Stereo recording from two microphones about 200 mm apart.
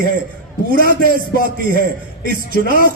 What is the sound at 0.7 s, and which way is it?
Speech, 45° right (ahead or behind).